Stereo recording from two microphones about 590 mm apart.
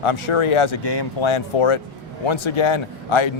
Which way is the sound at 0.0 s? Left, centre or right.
Left.